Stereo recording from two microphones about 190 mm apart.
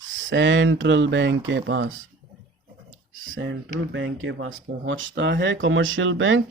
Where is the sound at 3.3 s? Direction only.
70° right (ahead or behind).